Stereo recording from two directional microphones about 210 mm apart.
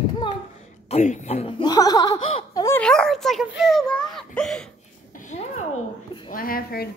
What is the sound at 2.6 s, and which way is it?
Speech, 5° left (ahead or behind).